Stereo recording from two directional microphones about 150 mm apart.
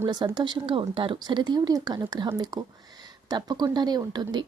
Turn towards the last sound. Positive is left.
turn(degrees=-30)  # may be behind; listen again after turning